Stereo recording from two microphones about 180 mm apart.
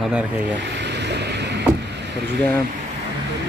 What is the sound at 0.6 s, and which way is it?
Boat, 75° right (ahead or behind).